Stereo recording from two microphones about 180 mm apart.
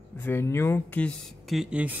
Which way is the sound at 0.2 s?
15° left (ahead or behind).